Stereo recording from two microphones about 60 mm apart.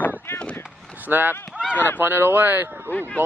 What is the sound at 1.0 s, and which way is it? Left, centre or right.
Speech, right.